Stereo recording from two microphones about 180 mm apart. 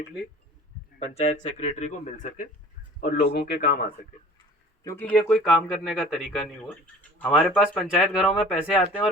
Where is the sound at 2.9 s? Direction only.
60° left (ahead or behind).